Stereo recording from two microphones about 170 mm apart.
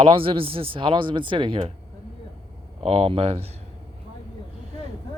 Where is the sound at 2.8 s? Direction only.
35° right (ahead or behind).